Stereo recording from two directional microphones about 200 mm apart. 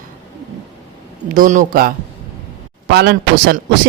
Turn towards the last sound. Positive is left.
turn(degrees=-55)  # may be behind; listen again after turning